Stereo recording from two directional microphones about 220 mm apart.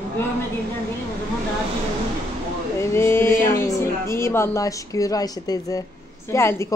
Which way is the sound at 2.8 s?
10° left (ahead or behind).